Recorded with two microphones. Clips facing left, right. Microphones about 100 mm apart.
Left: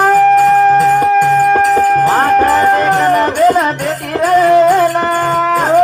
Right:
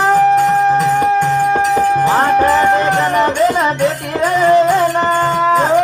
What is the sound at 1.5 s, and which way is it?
Music, 45° left (ahead or behind).